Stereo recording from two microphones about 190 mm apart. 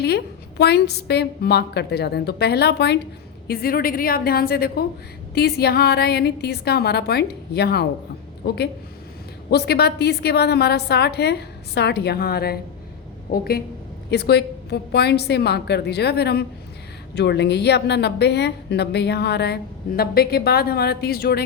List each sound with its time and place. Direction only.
0.6 s a woman's voice: 60° left (ahead or behind)